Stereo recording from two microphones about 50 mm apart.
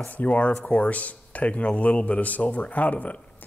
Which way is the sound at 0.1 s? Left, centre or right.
Left.